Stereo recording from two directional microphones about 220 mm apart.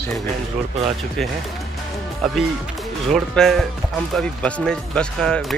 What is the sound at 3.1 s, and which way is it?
Speech, centre (ahead or behind).